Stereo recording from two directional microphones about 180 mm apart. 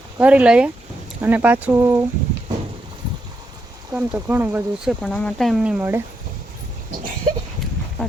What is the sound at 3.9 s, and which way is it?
Speech, 10° right (ahead or behind).